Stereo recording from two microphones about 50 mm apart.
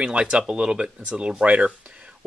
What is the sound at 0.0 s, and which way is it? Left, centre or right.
Speech, centre.